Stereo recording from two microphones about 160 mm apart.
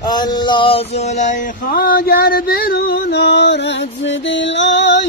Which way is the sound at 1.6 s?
65° left (ahead or behind).